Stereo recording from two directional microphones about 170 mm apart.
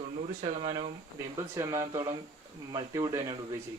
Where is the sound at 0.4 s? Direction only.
40° right (ahead or behind).